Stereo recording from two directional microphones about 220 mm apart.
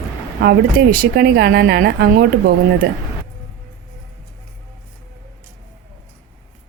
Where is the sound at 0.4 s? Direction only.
45° right (ahead or behind).